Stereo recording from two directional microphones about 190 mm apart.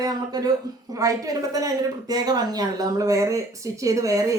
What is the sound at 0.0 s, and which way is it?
A woman's voice, 20° right (ahead or behind).